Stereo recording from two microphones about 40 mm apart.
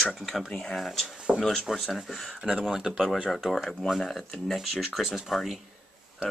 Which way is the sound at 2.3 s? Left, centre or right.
Right.